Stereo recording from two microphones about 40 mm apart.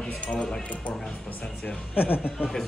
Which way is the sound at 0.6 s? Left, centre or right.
Left.